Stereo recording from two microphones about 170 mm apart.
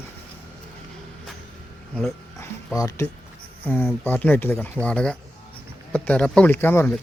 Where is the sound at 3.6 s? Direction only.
10° left (ahead or behind).